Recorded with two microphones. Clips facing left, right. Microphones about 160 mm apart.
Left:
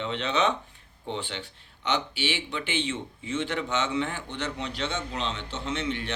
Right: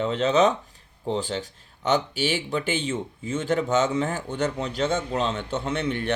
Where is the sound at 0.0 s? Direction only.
40° right (ahead or behind).